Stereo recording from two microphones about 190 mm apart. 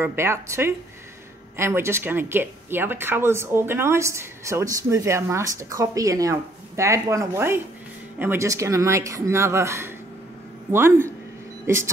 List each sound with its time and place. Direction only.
0.0 s speech: 10° right (ahead or behind)